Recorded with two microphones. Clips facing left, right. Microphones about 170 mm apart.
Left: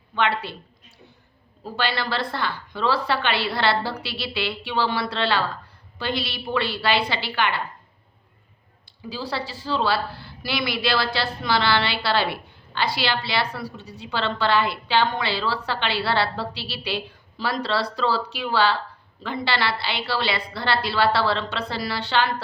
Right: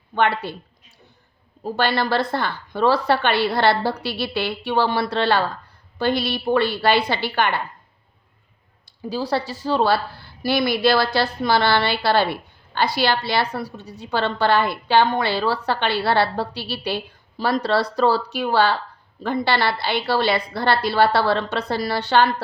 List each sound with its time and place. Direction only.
0.1 s a woman's voice: 45° right (ahead or behind)
1.6 s a woman's voice: 50° right (ahead or behind)
9.0 s a woman's voice: 45° right (ahead or behind)